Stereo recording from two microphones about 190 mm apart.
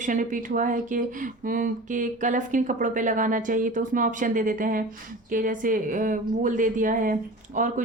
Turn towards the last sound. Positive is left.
turn(degrees=-40)  # may be behind; listen again after turning